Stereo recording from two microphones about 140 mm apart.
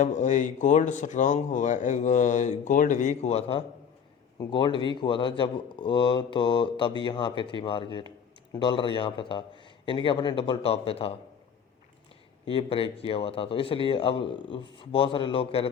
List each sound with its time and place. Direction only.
0.0 s speech: 60° left (ahead or behind); by 3.6 s 45° left (ahead or behind)
4.4 s speech: 35° left (ahead or behind)
12.5 s speech: 40° left (ahead or behind)